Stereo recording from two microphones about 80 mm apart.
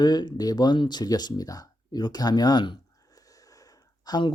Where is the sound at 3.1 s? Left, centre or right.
Left.